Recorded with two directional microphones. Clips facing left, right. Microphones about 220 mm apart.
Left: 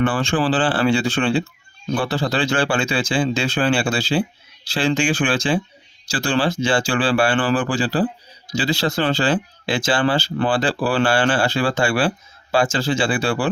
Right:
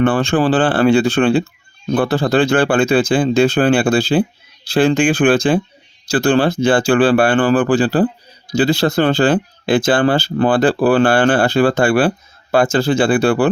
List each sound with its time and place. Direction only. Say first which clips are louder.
0.0 s speech: right 5 dB; 60° right (ahead or behind)